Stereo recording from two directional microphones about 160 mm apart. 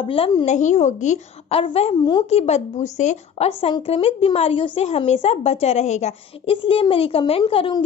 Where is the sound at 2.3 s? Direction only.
40° left (ahead or behind).